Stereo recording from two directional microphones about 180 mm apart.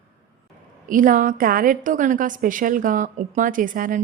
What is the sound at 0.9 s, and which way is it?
A woman's voice, 50° right (ahead or behind).